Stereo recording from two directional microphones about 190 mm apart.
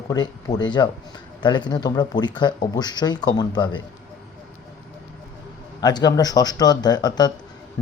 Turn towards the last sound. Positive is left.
turn(degrees=20)  # may be behind; listen again after turning